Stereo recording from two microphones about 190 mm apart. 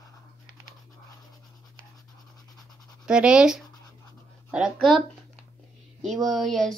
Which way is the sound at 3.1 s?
5° right (ahead or behind).